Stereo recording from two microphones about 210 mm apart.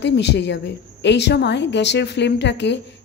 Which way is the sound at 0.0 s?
55° left (ahead or behind).